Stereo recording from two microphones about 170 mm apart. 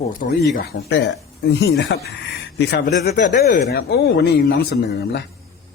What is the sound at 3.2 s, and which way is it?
Speech, 50° left (ahead or behind).